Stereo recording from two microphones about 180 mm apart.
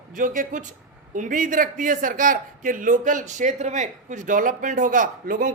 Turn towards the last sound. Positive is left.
turn(degrees=-50)  # may be behind; listen again after turning